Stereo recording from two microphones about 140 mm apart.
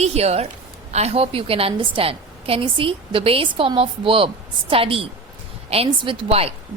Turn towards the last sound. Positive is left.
turn(degrees=-45)  # may be behind; listen again after turning